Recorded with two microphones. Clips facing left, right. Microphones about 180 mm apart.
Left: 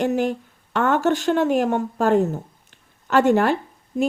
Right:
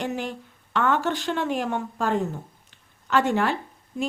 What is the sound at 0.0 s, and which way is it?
Speech, 45° left (ahead or behind).